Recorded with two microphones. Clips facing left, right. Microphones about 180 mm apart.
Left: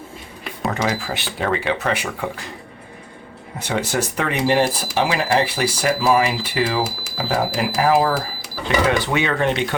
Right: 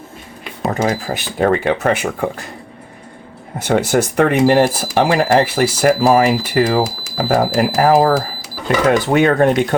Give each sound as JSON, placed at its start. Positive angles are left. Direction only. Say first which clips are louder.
{"t": 0.7, "sound": "speech", "louder": "right 5 dB", "side_deg": -40}
{"t": 3.7, "sound": "speech", "louder": "right 7 dB", "side_deg": -50}